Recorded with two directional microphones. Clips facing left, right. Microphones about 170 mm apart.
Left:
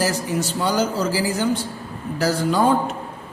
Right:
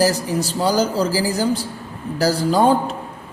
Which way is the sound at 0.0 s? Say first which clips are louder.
Right 4 dB; 35° right (ahead or behind).